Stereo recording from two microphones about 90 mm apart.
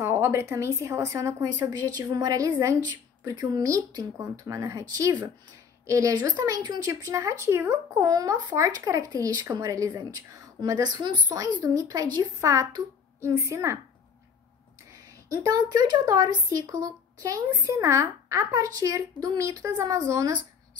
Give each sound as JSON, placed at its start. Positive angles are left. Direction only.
{"t": 0.0, "sound": "speech", "side_deg": -30}
{"t": 8.1, "sound": "speech", "side_deg": -40}
{"t": 11.6, "sound": "speech", "side_deg": -40}
{"t": 12.4, "sound": "speech", "side_deg": -35}
{"t": 14.9, "sound": "speech", "side_deg": -40}